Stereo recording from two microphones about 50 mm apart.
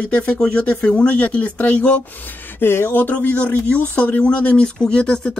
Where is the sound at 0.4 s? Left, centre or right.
Centre.